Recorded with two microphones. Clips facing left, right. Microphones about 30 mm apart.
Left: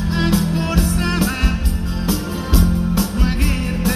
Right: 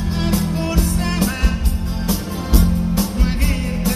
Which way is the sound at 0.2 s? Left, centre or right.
Left.